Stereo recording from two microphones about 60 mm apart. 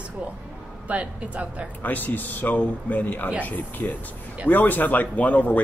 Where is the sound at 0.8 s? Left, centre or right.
Right.